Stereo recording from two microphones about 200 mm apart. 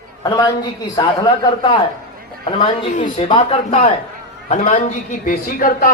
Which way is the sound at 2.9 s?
35° left (ahead or behind).